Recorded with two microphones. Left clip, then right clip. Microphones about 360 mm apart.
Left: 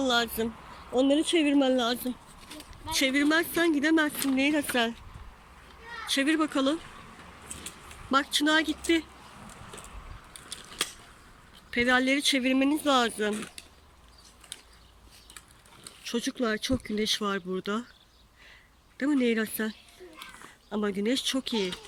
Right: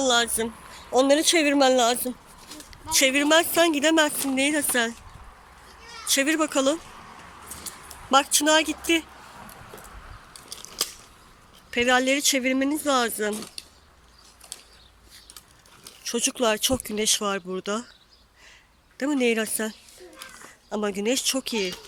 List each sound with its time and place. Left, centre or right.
0.0 s speech: centre
1.3 s speech: centre
6.1 s speech: centre
8.1 s speech: centre
11.7 s speech: centre
15.8 s speech: centre
18.9 s speech: centre